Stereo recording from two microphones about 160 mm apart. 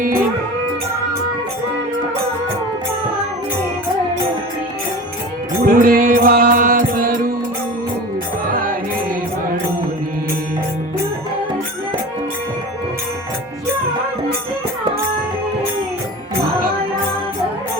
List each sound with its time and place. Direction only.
5.6 s music: 60° right (ahead or behind)
8.4 s music: 60° right (ahead or behind)